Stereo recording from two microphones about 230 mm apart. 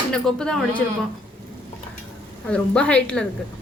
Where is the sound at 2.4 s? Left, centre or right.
Centre.